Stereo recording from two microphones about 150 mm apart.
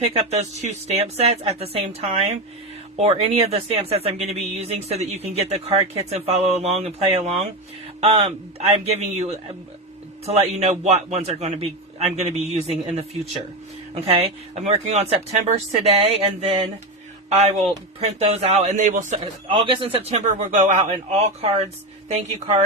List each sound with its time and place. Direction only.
0.0 s speech: 45° right (ahead or behind)
13.9 s speech: 35° right (ahead or behind)
14.5 s speech: 45° right (ahead or behind)
19.2 s speech: 35° right (ahead or behind)